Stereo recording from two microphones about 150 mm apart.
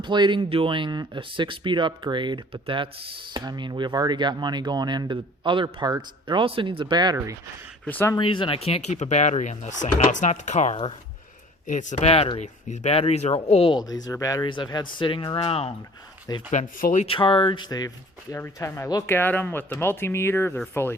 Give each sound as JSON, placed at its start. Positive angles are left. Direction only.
{"t": 0.0, "sound": "speech", "side_deg": -30}
{"t": 7.9, "sound": "speech", "side_deg": 10}
{"t": 8.1, "sound": "speech", "side_deg": 35}
{"t": 13.7, "sound": "speech", "side_deg": 25}
{"t": 16.5, "sound": "speech", "side_deg": 55}
{"t": 17.1, "sound": "speech", "side_deg": 35}